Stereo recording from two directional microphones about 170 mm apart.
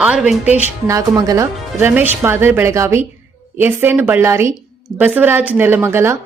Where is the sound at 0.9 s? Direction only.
20° right (ahead or behind).